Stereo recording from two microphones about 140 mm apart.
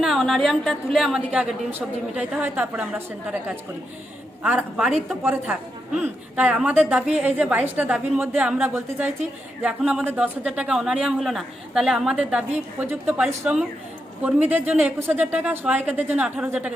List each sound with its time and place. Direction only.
0.0 s a woman's voice: centre (ahead or behind)
4.9 s speech: centre (ahead or behind)
5.2 s a woman's voice: 15° right (ahead or behind)